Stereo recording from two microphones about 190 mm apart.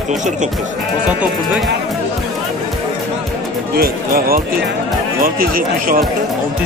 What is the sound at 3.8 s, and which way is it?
Speech, 50° right (ahead or behind).